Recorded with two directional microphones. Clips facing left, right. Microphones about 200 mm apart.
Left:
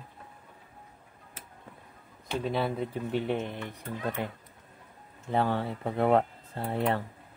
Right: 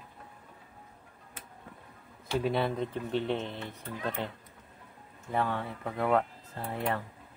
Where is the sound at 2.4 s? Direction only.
Centre (ahead or behind).